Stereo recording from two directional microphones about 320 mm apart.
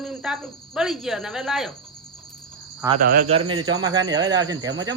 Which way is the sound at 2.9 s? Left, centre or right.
Right.